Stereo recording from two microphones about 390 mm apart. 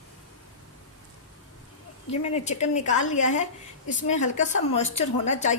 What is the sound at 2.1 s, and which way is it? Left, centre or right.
A woman's voice, centre.